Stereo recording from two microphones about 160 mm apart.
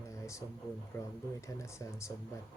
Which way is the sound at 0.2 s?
20° left (ahead or behind).